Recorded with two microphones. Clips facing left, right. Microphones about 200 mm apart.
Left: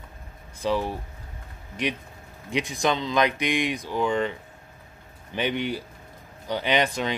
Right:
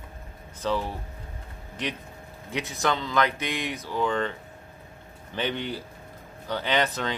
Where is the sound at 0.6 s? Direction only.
15° left (ahead or behind).